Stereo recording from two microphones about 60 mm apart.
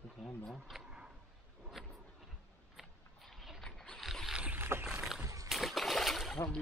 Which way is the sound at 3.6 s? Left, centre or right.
Centre.